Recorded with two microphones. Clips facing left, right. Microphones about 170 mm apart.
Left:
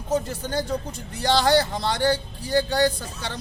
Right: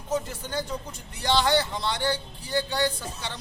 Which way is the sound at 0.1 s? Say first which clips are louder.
Left 4 dB; 35° left (ahead or behind).